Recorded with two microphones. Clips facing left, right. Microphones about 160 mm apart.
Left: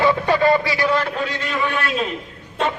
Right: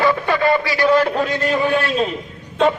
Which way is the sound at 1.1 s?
40° right (ahead or behind).